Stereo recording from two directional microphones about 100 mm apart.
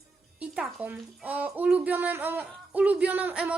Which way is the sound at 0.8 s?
15° right (ahead or behind).